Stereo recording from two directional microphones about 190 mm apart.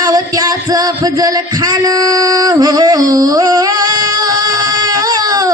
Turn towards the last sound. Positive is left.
turn(degrees=-20)  # may be behind; listen again after turning